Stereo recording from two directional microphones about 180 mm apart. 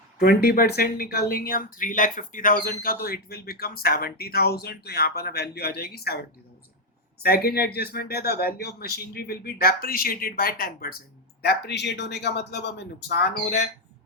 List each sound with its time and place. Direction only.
0.2 s speech: 60° left (ahead or behind)
7.2 s speech: 60° left (ahead or behind)
11.4 s speech: 70° left (ahead or behind)